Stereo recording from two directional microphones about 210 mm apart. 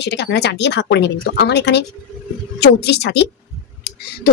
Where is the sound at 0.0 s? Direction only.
55° left (ahead or behind).